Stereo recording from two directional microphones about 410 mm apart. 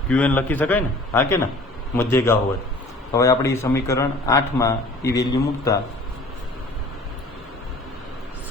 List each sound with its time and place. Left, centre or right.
0.1 s a man's voice: centre